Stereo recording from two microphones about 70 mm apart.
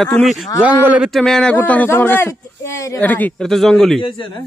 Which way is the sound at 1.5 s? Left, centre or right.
Left.